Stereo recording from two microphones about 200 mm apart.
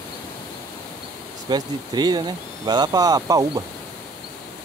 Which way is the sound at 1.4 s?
20° right (ahead or behind).